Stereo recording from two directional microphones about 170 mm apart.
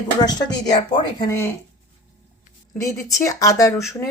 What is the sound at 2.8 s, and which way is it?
Speech, 20° left (ahead or behind).